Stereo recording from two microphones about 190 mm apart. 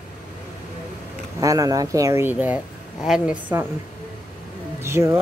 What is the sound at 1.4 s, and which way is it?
Speech, 20° right (ahead or behind).